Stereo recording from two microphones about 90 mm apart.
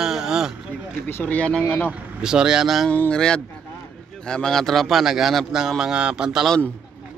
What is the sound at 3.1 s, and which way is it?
A man's voice, 10° left (ahead or behind).